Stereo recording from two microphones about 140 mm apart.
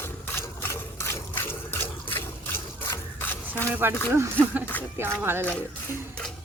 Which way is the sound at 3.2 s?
15° left (ahead or behind).